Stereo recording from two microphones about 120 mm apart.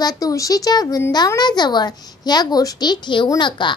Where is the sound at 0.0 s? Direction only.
30° left (ahead or behind).